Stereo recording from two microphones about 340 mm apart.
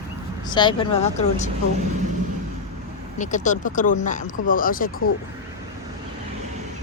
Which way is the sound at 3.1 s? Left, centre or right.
Left.